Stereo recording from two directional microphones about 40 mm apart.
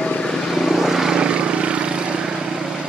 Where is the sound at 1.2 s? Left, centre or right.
Right.